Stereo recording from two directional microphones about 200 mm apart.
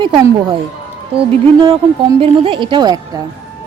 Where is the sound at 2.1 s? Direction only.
30° right (ahead or behind).